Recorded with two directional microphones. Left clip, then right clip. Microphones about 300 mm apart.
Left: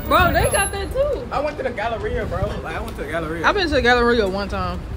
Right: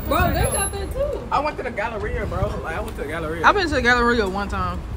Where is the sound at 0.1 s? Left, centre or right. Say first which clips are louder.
Left 5 dB; centre.